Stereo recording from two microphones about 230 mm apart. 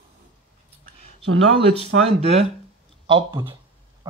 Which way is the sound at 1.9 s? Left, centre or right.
Right.